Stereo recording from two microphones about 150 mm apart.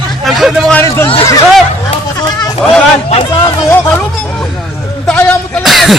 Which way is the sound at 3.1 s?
40° left (ahead or behind).